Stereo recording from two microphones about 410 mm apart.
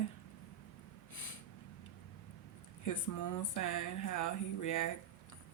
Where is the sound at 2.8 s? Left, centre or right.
Left.